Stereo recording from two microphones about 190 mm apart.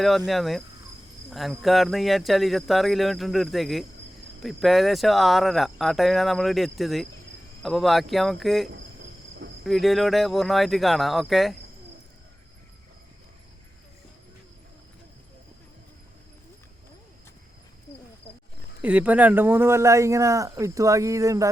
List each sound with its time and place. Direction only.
0.3 s speech: centre (ahead or behind)
18.8 s speech: 10° right (ahead or behind)